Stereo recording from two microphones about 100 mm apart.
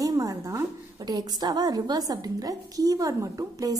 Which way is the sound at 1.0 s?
45° right (ahead or behind).